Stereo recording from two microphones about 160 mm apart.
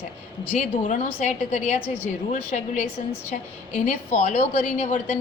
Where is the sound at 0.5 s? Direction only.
50° left (ahead or behind).